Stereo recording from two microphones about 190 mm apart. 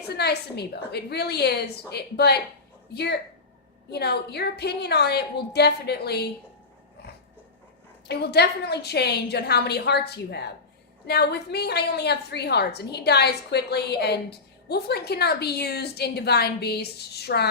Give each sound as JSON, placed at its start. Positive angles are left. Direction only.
{"t": 0.1, "sound": "a woman's voice", "side_deg": 60}
{"t": 8.0, "sound": "a woman's voice", "side_deg": 60}